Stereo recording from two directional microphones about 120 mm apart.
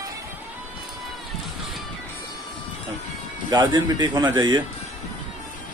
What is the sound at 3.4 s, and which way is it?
A man's voice, 35° right (ahead or behind).